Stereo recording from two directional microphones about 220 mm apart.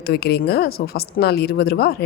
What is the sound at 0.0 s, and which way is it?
Speech, 45° left (ahead or behind).